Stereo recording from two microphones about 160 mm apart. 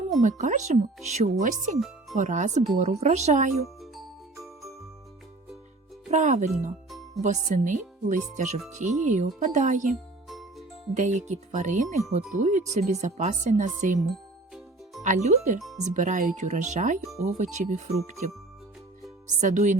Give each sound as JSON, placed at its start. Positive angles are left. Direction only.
{"t": 0.2, "sound": "speech", "side_deg": -50}
{"t": 6.1, "sound": "speech", "side_deg": -50}
{"t": 10.2, "sound": "music", "side_deg": 0}
{"t": 10.9, "sound": "speech", "side_deg": -50}
{"t": 15.0, "sound": "speech", "side_deg": -45}
{"t": 19.4, "sound": "speech", "side_deg": -50}